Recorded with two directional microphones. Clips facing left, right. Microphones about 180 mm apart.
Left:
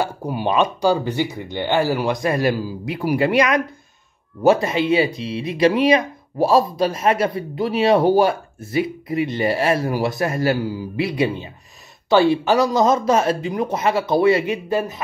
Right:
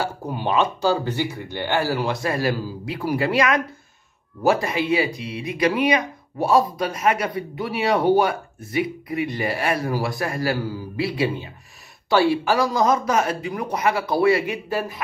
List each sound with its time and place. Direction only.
0.0 s speech: 10° left (ahead or behind)